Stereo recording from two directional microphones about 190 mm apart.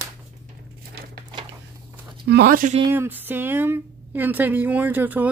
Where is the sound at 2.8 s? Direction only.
10° right (ahead or behind).